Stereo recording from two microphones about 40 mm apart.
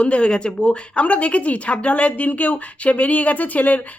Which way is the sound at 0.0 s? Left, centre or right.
Left.